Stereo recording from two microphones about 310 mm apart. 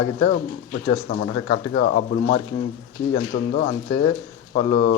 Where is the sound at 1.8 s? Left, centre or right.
Left.